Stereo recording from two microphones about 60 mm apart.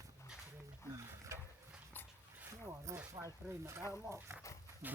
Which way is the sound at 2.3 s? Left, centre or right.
Right.